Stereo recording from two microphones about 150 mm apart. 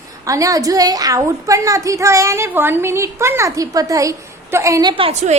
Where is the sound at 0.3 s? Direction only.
20° right (ahead or behind).